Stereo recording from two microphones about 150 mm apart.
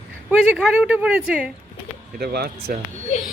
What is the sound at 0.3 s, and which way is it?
Speech, 5° right (ahead or behind).